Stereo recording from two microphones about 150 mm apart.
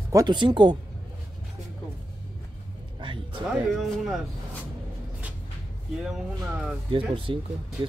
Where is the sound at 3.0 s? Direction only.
35° right (ahead or behind).